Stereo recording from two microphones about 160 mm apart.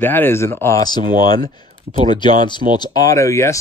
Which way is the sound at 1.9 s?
45° right (ahead or behind).